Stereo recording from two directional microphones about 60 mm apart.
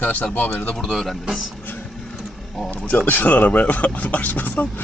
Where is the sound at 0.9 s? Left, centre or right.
Centre.